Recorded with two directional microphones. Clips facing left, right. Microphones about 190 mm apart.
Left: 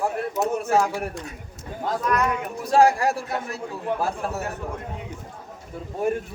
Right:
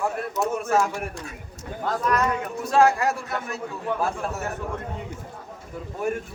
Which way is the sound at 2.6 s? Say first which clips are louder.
Left 2 dB; 35° left (ahead or behind).